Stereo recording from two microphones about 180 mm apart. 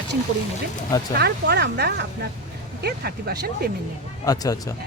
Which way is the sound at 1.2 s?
65° right (ahead or behind).